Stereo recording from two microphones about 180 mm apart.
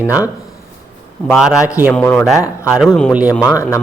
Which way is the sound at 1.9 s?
10° left (ahead or behind).